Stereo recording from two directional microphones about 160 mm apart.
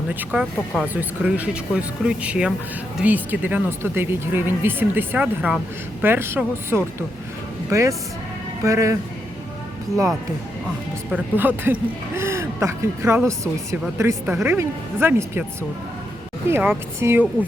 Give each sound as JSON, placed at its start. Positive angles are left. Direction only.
{"t": 0.1, "sound": "speech", "side_deg": -10}
{"t": 11.1, "sound": "speech", "side_deg": -10}
{"t": 16.5, "sound": "speech", "side_deg": -15}